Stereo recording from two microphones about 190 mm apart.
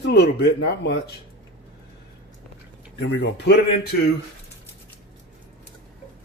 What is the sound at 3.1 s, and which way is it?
Speech, 65° left (ahead or behind).